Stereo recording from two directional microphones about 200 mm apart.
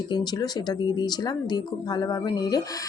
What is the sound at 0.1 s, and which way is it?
Speech, 20° left (ahead or behind).